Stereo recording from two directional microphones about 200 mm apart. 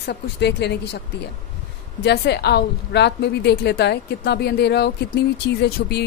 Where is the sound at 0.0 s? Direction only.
55° left (ahead or behind).